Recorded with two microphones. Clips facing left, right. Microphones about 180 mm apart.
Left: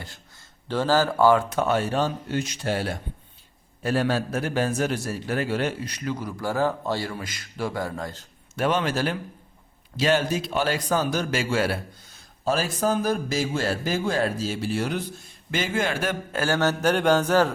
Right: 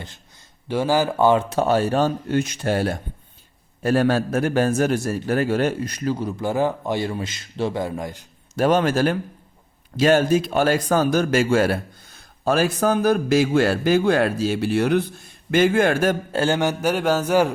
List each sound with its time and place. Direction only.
0.7 s a man's voice: 10° right (ahead or behind); by 6.1 s 45° right (ahead or behind)
6.1 s a man's voice: 25° right (ahead or behind)
8.5 s a man's voice: 40° right (ahead or behind)
12.5 s a man's voice: 60° right (ahead or behind)
16.3 s a man's voice: 25° right (ahead or behind)
16.6 s mantra: 10° right (ahead or behind)